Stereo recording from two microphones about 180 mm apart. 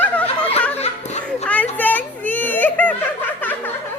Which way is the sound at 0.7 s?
35° left (ahead or behind).